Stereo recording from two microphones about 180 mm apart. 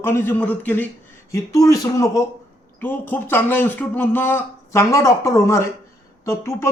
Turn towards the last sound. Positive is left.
turn(degrees=15)  # may be behind; listen again after turning